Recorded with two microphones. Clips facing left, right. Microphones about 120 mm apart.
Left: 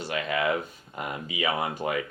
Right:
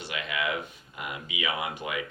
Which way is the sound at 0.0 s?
40° left (ahead or behind).